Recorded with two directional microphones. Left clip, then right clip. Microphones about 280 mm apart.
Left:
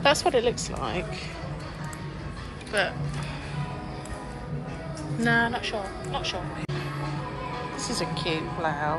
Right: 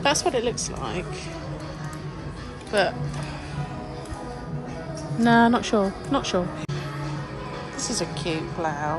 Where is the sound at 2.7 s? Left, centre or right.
Centre.